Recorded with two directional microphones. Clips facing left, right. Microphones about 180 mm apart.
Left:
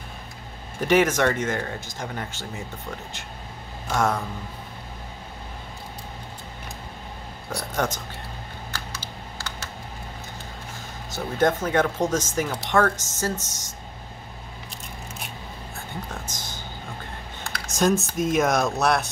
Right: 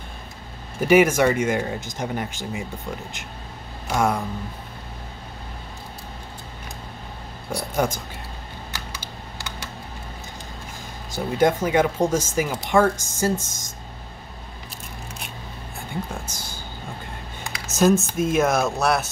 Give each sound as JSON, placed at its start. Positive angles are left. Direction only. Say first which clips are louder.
{"t": 0.7, "sound": "speech", "louder": "right 4 dB", "side_deg": -10}
{"t": 3.8, "sound": "speech", "louder": "right 2 dB", "side_deg": -10}
{"t": 7.5, "sound": "speech", "louder": "right 3 dB", "side_deg": -10}
{"t": 8.7, "sound": "typing", "louder": "even", "side_deg": -15}
{"t": 11.1, "sound": "speech", "louder": "right 2 dB", "side_deg": -10}
{"t": 16.1, "sound": "speech", "louder": "right 2 dB", "side_deg": -10}
{"t": 17.6, "sound": "speech", "louder": "right 4 dB", "side_deg": -5}